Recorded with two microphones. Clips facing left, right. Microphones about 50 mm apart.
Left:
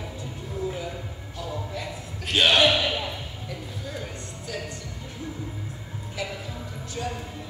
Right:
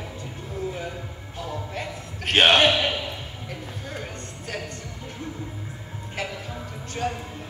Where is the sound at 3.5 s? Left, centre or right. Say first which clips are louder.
Even; right.